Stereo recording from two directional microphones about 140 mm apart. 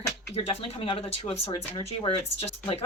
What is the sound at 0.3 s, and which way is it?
A woman's voice, 45° left (ahead or behind).